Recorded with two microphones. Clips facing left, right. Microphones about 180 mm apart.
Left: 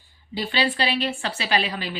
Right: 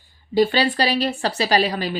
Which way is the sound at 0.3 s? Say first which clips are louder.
Right 7 dB; 40° right (ahead or behind).